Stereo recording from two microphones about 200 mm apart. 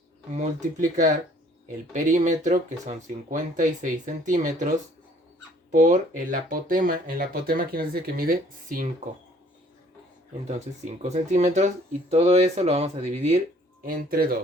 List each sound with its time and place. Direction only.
0.3 s speech: 40° right (ahead or behind)
5.7 s speech: 40° right (ahead or behind)
10.4 s speech: 35° right (ahead or behind)
13.8 s speech: 45° right (ahead or behind)